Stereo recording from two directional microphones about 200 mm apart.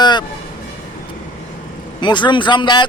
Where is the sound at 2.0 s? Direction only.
25° left (ahead or behind).